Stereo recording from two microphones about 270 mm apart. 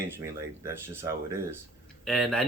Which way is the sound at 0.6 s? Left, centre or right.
Centre.